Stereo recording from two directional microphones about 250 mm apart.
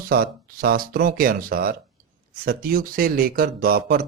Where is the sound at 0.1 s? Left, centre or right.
Right.